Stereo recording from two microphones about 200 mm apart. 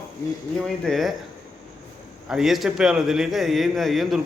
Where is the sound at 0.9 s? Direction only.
Centre (ahead or behind).